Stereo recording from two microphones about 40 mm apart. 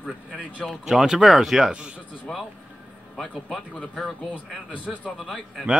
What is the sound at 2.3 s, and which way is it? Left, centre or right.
Speech, left.